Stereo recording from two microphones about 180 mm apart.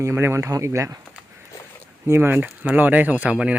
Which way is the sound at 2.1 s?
10° right (ahead or behind).